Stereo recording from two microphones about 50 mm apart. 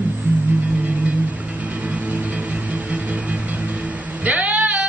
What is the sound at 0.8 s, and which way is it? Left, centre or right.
Music, right.